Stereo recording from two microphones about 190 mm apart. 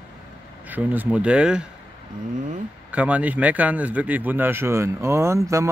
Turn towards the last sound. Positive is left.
turn(degrees=-15)  # may be behind; listen again after turning